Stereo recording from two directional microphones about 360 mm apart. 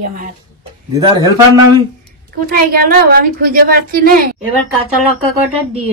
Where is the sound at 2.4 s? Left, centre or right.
Right.